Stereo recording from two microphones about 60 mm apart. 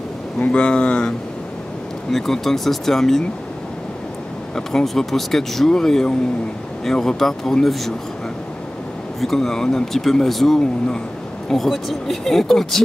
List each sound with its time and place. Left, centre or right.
0.4 s speech: centre
2.0 s speech: centre
4.6 s speech: centre
9.2 s speech: centre